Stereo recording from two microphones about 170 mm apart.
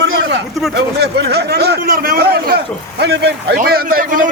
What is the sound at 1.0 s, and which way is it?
Speech, 75° right (ahead or behind).